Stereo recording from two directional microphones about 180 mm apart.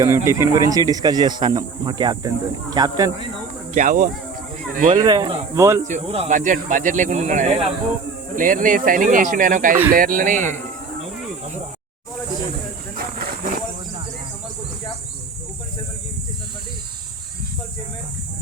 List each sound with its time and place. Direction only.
0.0 s speech: 15° right (ahead or behind)
3.8 s speech: 45° right (ahead or behind)
4.9 s speech: 20° right (ahead or behind)
5.8 s speech: 35° right (ahead or behind)
13.0 s a sound: 55° right (ahead or behind)